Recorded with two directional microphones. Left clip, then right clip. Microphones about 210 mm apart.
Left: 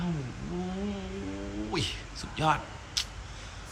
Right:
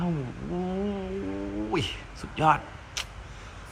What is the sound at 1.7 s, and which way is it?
Speech, 5° right (ahead or behind).